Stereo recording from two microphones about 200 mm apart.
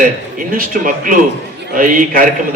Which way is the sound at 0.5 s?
45° right (ahead or behind).